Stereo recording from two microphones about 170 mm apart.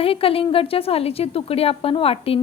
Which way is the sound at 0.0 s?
35° left (ahead or behind).